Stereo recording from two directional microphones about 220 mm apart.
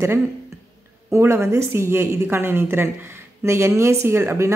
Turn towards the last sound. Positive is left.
turn(degrees=-10)  # may be behind; listen again after turning